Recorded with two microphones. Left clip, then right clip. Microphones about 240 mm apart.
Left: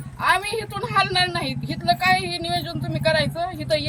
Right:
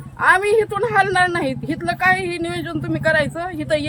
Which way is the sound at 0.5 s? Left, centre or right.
Centre.